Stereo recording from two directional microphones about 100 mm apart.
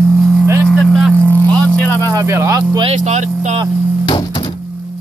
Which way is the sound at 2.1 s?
30° right (ahead or behind).